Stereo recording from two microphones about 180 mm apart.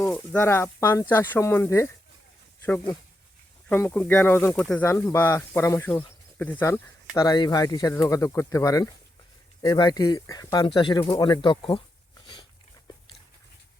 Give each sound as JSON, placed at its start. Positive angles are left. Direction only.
{"t": 0.0, "sound": "speech", "side_deg": 10}
{"t": 3.7, "sound": "speech", "side_deg": 10}
{"t": 7.2, "sound": "speech", "side_deg": 20}
{"t": 12.2, "sound": "a sound", "side_deg": 25}